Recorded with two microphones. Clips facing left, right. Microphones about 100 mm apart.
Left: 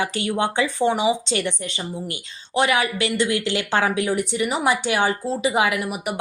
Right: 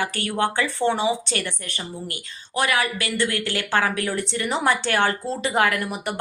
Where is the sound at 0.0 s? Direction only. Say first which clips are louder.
Left 1 dB; 15° left (ahead or behind).